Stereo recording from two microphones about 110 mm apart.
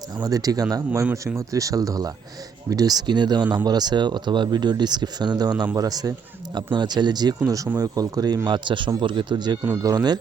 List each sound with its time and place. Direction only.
0.2 s speech: 35° right (ahead or behind)
8.4 s speech: 45° right (ahead or behind)